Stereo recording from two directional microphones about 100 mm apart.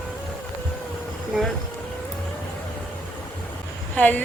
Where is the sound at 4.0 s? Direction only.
15° left (ahead or behind).